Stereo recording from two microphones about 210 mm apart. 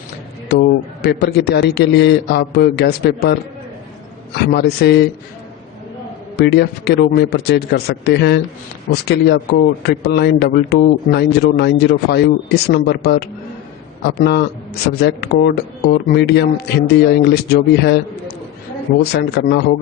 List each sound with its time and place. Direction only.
0.4 s a man's voice: 50° left (ahead or behind)
4.5 s a man's voice: 50° left (ahead or behind)
6.3 s a man's voice: 50° left (ahead or behind)